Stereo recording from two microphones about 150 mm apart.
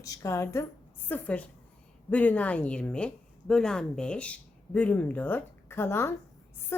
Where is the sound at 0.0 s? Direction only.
20° left (ahead or behind).